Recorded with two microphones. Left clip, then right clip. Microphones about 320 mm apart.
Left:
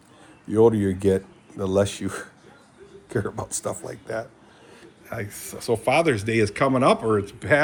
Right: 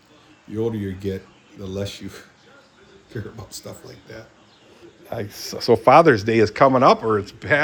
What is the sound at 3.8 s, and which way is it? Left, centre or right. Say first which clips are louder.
Speech: left 9 dB; centre.